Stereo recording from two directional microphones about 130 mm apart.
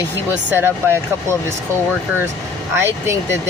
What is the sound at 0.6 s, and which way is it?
Speech, 20° right (ahead or behind).